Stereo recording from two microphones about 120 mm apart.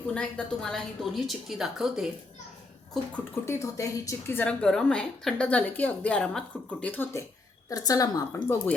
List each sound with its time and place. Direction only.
0.1 s a woman's voice: 5° left (ahead or behind)
3.4 s a woman's voice: 25° left (ahead or behind)